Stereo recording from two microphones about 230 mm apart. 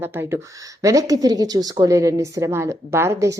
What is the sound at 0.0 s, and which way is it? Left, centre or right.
Speech, centre.